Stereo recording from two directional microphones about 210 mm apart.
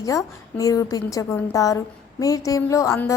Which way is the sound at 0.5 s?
15° left (ahead or behind).